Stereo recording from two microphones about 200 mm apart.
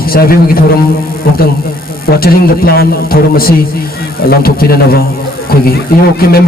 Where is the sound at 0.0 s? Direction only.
50° left (ahead or behind).